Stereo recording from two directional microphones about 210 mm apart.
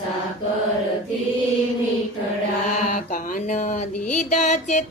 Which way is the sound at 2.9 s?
35° left (ahead or behind).